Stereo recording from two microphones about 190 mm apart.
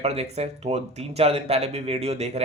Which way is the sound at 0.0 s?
35° right (ahead or behind).